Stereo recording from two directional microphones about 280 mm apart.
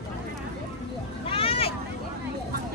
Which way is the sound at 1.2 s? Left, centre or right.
Centre.